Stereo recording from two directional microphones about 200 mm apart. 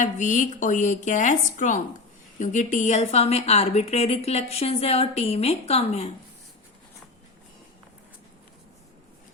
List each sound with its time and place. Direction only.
0.0 s a woman's voice: 40° left (ahead or behind)